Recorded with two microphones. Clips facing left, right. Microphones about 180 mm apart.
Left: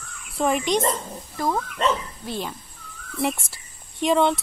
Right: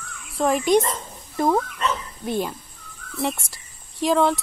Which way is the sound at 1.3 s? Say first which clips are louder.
Right 5 dB; 25° right (ahead or behind).